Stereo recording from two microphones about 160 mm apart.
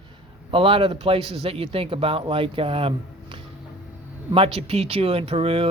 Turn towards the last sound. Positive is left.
turn(degrees=-35)  # may be behind; listen again after turning